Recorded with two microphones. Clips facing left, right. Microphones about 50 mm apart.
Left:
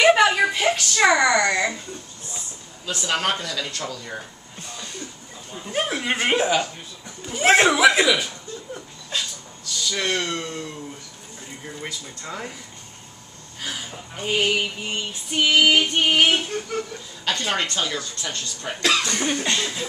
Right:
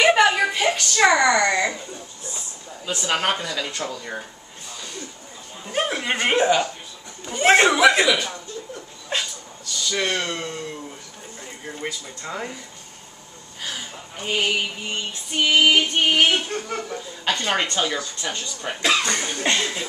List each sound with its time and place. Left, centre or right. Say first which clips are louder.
0.0 s a sound: left 1 dB; centre
2.9 s speech: right 1 dB; centre
5.7 s speech: right 1 dB; centre
7.2 s female singing: right 1 dB; centre
9.1 s a sound: right 2 dB; right
9.7 s speech: right 1 dB; centre
11.6 s speech: right 3 dB; centre
13.7 s female singing: left 1 dB; centre
16.6 s speech: even; centre
19.4 s a sound: right 2 dB; right